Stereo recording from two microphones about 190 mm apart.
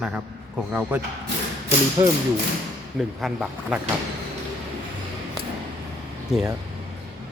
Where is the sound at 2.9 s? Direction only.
5° right (ahead or behind).